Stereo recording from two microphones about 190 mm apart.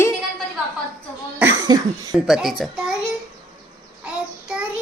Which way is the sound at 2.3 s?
Centre (ahead or behind).